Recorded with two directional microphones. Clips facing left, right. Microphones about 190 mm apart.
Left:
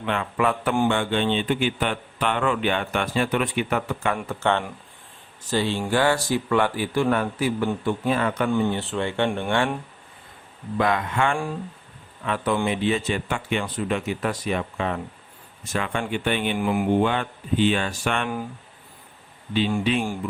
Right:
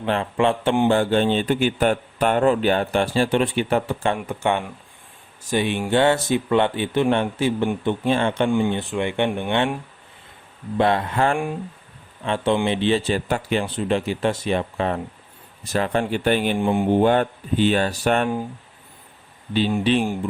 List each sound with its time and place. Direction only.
0.0 s a man's voice: 30° right (ahead or behind)
4.3 s speech: 15° right (ahead or behind)
8.4 s speech: 15° right (ahead or behind)
10.8 s a man's voice: 30° right (ahead or behind)
16.6 s speech: 25° right (ahead or behind)
17.0 s a man's voice: 40° right (ahead or behind)
19.8 s a man's voice: 30° right (ahead or behind)